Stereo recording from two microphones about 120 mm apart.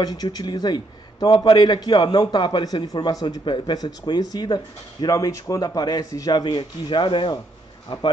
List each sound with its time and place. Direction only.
0.0 s a man's voice: 35° left (ahead or behind)